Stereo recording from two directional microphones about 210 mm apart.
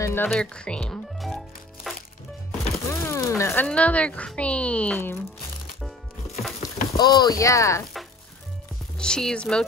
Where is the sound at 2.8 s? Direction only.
15° left (ahead or behind).